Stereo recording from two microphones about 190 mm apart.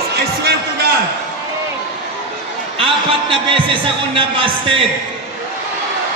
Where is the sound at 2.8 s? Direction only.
30° right (ahead or behind).